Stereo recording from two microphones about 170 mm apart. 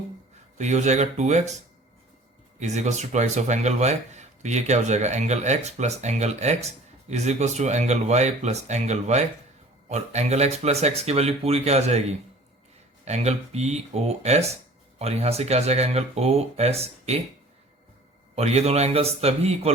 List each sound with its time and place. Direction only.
0.6 s speech: 45° right (ahead or behind)
2.6 s speech: 45° right (ahead or behind)
18.3 s speech: 40° right (ahead or behind)